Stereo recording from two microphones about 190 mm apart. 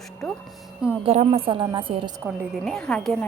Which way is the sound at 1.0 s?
30° right (ahead or behind).